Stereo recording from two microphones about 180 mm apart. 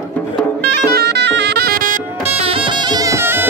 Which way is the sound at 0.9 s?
65° right (ahead or behind).